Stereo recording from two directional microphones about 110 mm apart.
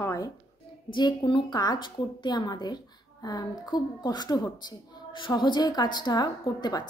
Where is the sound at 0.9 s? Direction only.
45° left (ahead or behind).